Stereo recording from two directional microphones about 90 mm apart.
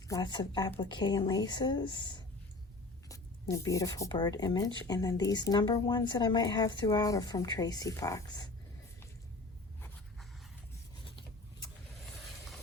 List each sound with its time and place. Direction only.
0.2 s speech: 55° left (ahead or behind)
3.1 s speech: 40° left (ahead or behind)
4.1 s speech: 55° left (ahead or behind)
6.8 s speech: 45° left (ahead or behind)